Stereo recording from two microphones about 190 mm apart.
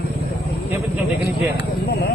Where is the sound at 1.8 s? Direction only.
60° left (ahead or behind).